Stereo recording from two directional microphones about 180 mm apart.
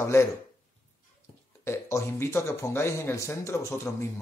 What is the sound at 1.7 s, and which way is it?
A man's voice, 15° left (ahead or behind).